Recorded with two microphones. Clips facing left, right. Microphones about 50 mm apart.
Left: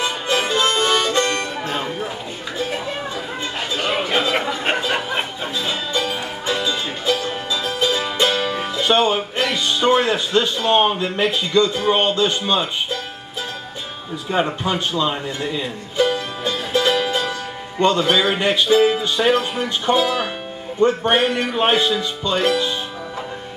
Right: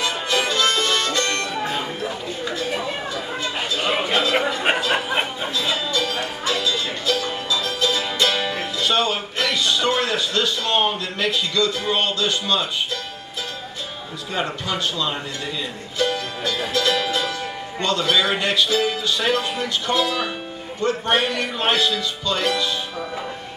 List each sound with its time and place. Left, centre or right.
0.0 s harmonica: left
3.8 s a sound: centre
5.6 s music: left
8.5 s speech: left
14.3 s speech: left
16.0 s music: centre
17.7 s speech: left